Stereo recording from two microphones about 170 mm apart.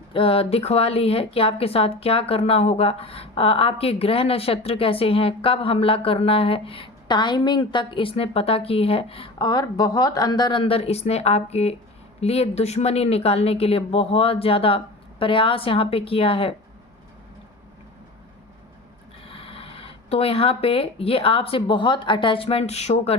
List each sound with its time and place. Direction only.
0.1 s a woman's voice: 35° left (ahead or behind)
19.3 s speech: 35° left (ahead or behind)